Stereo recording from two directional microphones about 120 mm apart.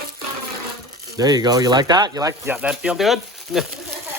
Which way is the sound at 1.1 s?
35° right (ahead or behind).